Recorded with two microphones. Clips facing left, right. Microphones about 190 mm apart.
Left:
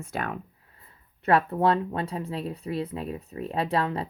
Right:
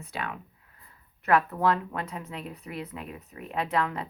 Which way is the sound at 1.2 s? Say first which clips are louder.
Left 2 dB; 30° left (ahead or behind).